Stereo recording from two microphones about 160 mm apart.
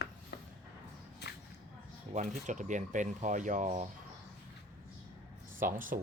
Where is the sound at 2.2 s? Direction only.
50° right (ahead or behind).